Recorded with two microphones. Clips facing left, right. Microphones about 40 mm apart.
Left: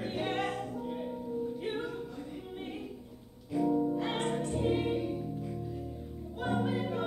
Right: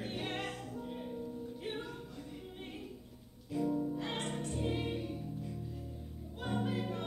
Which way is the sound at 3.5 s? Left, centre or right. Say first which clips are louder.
Left 6 dB; centre.